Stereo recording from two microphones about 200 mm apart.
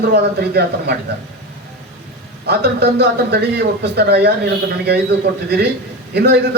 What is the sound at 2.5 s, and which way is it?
A man's voice, 55° right (ahead or behind).